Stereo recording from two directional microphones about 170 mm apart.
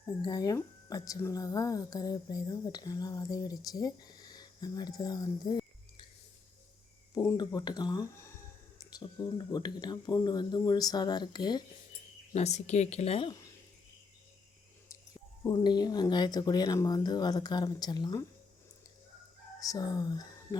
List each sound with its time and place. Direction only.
0.2 s speech: 20° left (ahead or behind)
7.1 s speech: 20° left (ahead or behind)
12.3 s a woman's voice: 40° left (ahead or behind)
15.4 s speech: 25° left (ahead or behind)
19.5 s speech: 20° left (ahead or behind)